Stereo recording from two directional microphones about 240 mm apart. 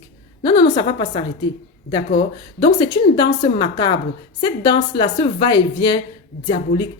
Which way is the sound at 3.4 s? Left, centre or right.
Left.